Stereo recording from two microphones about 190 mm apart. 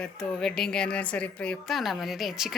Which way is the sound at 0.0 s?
5° left (ahead or behind).